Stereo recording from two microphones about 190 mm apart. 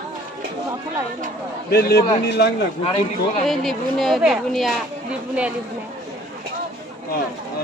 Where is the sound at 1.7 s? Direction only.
55° left (ahead or behind).